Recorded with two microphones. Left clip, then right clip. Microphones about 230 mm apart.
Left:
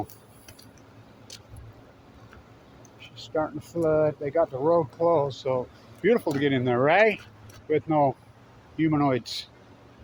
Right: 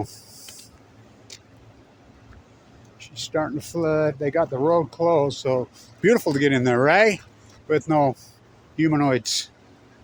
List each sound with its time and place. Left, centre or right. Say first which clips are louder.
3.3 s speech: right 3 dB; right